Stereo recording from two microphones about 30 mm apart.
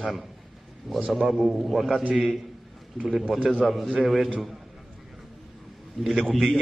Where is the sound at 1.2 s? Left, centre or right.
Centre.